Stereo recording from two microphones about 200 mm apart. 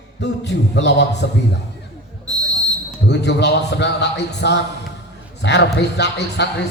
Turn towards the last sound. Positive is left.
turn(degrees=60)  # may be behind; listen again after turning